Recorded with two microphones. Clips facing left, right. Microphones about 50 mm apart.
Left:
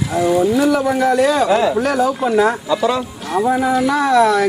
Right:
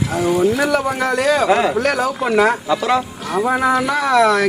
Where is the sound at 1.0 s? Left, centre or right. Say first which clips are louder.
Left 2 dB; right.